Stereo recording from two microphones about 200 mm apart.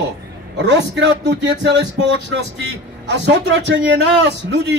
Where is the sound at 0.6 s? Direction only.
65° right (ahead or behind).